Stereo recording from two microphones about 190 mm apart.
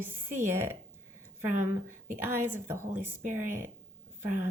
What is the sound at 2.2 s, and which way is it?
Speech, 10° right (ahead or behind).